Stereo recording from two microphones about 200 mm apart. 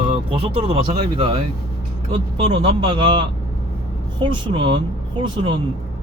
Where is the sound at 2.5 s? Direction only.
25° right (ahead or behind).